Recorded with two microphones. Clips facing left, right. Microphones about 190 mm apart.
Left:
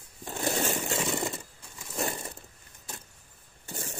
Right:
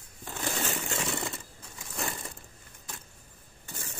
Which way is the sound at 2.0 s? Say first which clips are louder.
Left 4 dB; 20° left (ahead or behind).